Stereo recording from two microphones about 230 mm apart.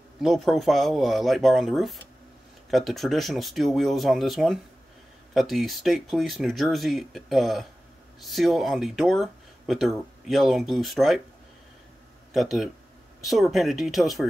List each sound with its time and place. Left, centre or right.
0.2 s speech: centre
12.4 s speech: centre